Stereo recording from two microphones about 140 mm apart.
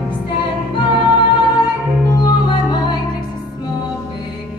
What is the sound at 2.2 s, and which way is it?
Music, 30° left (ahead or behind).